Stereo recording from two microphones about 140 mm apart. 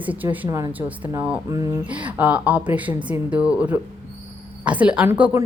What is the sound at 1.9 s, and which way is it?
Speech, 10° right (ahead or behind).